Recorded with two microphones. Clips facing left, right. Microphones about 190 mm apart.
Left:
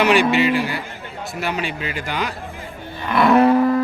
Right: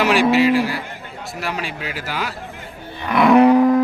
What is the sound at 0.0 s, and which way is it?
A man's voice, centre (ahead or behind).